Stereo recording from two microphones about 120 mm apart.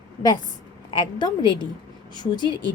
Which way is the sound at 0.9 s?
40° left (ahead or behind).